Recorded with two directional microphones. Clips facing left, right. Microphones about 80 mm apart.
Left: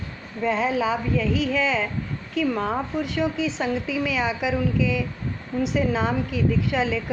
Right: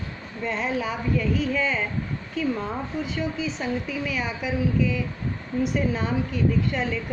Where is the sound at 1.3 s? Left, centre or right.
Left.